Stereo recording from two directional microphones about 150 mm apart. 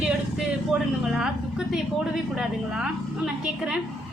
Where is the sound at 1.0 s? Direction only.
5° right (ahead or behind).